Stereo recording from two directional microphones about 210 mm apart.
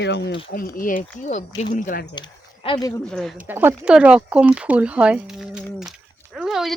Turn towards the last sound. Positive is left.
turn(degrees=0)  # may be behind; listen again after turning